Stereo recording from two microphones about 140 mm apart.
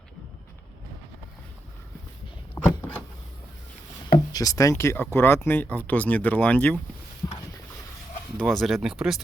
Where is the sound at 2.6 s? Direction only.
25° left (ahead or behind).